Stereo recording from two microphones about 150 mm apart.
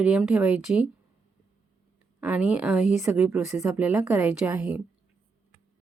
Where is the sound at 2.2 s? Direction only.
10° right (ahead or behind).